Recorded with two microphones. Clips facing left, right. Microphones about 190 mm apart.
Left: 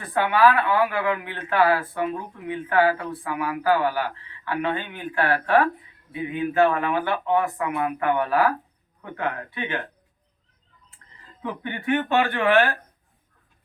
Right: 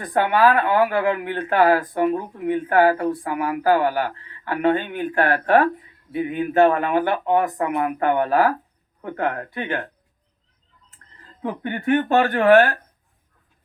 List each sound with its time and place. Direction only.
0.0 s speech: 45° right (ahead or behind)
11.4 s speech: 45° right (ahead or behind)